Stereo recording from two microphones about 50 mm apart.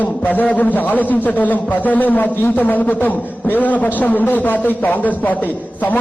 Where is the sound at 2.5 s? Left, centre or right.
Left.